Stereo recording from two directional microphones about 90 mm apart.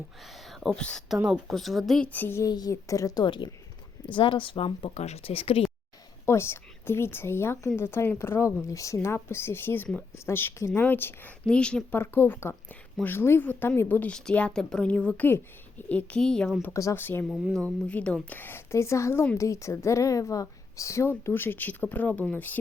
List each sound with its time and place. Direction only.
0.6 s a woman's voice: 10° left (ahead or behind)
2.1 s a woman's voice: 20° left (ahead or behind)
2.4 s a woman's voice: 45° left (ahead or behind)
3.2 s speech: 65° left (ahead or behind); by 5.6 s 90° left
6.2 s a woman's voice: 30° left (ahead or behind)
11.4 s a woman's voice: 10° left (ahead or behind)
11.9 s a woman's voice: 25° left (ahead or behind); by 16.5 s 10° left (ahead or behind)
16.9 s a woman's voice: 20° left (ahead or behind)